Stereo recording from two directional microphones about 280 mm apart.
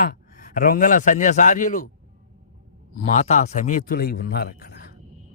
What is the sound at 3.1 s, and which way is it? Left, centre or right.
A man's voice, left.